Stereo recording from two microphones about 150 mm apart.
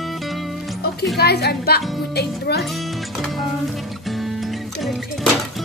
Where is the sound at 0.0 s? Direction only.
Centre (ahead or behind).